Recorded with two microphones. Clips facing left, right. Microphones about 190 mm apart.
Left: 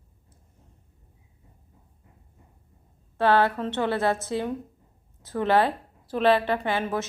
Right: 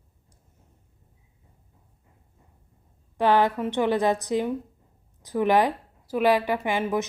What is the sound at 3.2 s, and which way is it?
Speech, 15° right (ahead or behind).